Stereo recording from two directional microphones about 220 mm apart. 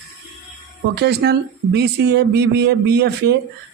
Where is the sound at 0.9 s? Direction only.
50° right (ahead or behind).